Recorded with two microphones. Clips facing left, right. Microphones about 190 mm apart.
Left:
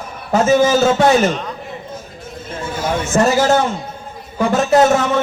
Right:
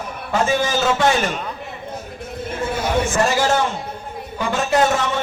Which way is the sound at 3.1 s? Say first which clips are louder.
Left 8 dB; 40° left (ahead or behind).